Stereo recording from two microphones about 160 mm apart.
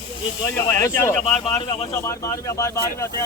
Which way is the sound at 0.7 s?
15° left (ahead or behind).